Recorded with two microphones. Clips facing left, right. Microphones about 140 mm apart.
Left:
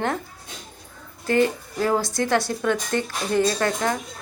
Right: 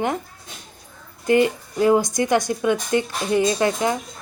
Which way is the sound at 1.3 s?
15° right (ahead or behind).